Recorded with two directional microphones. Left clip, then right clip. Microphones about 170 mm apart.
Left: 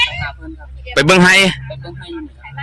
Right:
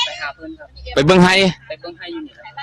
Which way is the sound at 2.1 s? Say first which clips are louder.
Left 1 dB; 30° right (ahead or behind).